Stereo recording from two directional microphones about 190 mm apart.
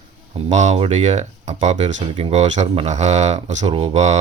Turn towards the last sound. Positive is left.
turn(degrees=-35)  # may be behind; listen again after turning